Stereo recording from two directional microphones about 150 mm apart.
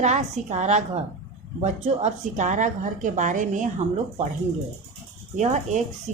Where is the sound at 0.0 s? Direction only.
50° right (ahead or behind).